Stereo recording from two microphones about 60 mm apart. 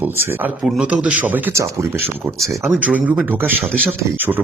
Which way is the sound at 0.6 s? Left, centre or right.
Centre.